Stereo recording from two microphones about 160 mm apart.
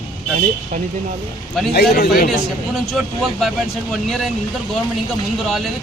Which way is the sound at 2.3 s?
Centre (ahead or behind).